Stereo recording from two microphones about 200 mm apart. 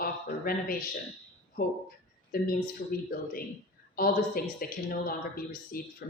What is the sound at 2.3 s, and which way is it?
A woman's voice, 45° left (ahead or behind).